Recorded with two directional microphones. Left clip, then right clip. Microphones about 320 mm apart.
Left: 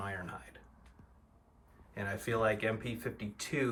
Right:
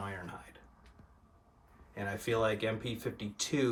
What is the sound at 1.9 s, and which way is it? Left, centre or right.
Speech, centre.